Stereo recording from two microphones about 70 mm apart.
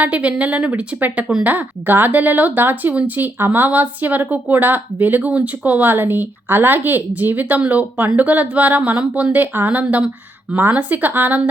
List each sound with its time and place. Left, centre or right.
0.0 s speech: centre